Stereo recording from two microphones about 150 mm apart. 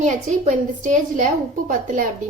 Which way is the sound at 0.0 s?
55° right (ahead or behind).